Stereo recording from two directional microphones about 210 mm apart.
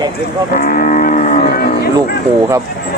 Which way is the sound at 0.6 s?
40° left (ahead or behind).